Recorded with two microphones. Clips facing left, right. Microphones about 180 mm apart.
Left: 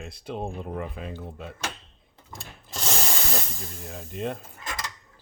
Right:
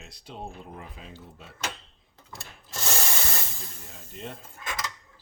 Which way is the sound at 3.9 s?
60° left (ahead or behind).